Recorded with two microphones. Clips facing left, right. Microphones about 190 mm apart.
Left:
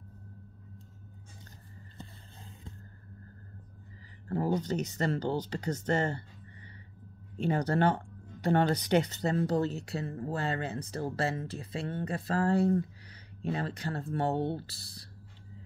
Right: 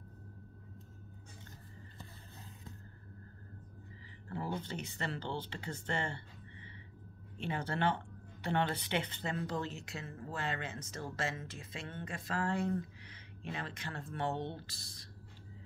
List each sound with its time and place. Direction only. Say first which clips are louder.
4.3 s speech: left 9 dB; 40° left (ahead or behind)
7.3 s speech: left 9 dB; 40° left (ahead or behind)